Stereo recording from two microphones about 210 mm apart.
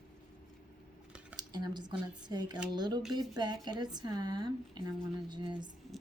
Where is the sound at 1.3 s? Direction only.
20° right (ahead or behind).